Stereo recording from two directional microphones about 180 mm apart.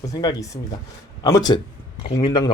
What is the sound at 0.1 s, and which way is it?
Speech, 20° left (ahead or behind).